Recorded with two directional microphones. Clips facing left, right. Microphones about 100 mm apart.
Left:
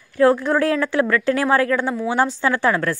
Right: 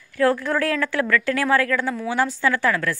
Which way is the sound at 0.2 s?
20° left (ahead or behind).